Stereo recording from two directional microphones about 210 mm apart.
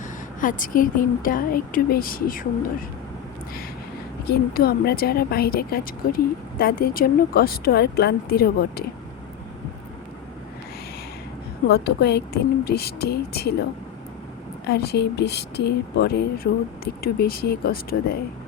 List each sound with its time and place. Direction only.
0.3 s a woman's voice: 40° left (ahead or behind)
4.3 s speech: 45° left (ahead or behind)
11.7 s speech: 50° left (ahead or behind)
14.7 s speech: 50° left (ahead or behind)